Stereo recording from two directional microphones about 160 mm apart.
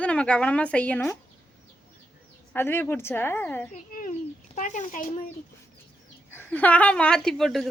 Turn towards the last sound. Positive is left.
turn(degrees=0)  # may be behind; listen again after turning